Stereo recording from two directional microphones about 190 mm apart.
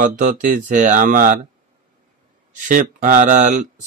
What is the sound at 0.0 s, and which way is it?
Speech, 45° right (ahead or behind).